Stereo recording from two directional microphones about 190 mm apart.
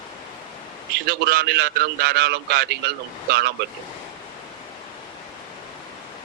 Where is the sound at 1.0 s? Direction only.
60° right (ahead or behind).